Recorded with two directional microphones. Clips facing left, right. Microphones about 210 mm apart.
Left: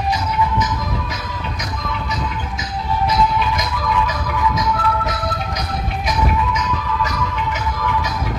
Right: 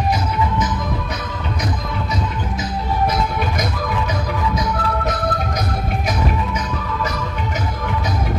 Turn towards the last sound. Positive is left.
turn(degrees=-35)  # may be behind; listen again after turning